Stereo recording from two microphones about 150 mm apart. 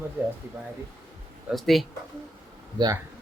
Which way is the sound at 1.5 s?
Centre (ahead or behind).